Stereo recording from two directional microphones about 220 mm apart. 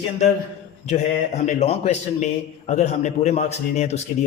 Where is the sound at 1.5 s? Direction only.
30° left (ahead or behind).